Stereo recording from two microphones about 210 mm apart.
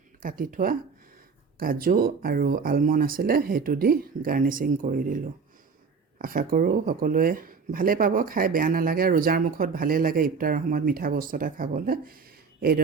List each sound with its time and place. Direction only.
0.2 s speech: 40° right (ahead or behind)